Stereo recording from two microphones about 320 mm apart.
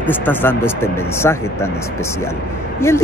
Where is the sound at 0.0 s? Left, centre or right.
Centre.